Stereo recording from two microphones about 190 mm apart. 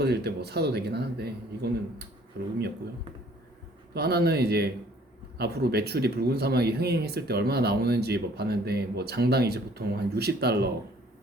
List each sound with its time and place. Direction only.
0.0 s speech: 60° right (ahead or behind)
3.9 s speech: 55° right (ahead or behind)